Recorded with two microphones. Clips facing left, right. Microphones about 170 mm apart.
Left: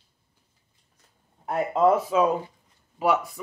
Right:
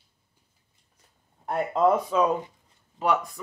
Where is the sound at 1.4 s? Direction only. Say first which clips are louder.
Left 1 dB; 5° left (ahead or behind).